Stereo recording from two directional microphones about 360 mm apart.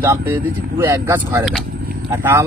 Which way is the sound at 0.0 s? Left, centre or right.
Centre.